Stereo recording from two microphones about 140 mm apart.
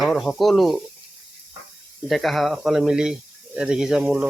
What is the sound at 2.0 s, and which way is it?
Speech, centre (ahead or behind).